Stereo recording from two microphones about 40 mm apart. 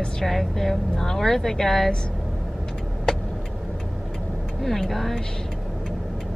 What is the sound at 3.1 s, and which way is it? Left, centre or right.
Vehicle, centre.